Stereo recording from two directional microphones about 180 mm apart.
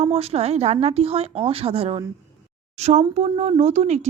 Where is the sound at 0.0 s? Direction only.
35° right (ahead or behind).